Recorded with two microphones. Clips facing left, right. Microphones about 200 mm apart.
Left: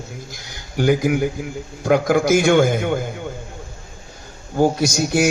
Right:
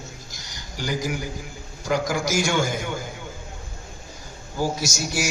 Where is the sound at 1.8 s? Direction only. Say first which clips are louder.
Left 8 dB; 55° left (ahead or behind).